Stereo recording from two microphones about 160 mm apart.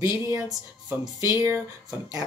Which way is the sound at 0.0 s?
20° right (ahead or behind).